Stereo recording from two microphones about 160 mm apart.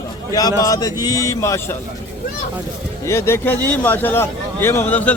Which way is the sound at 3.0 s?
15° left (ahead or behind).